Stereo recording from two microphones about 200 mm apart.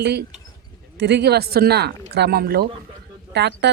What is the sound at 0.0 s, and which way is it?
Speech, 55° right (ahead or behind).